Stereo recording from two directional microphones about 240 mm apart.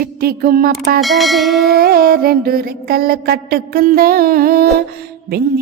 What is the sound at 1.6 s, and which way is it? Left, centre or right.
Music, right.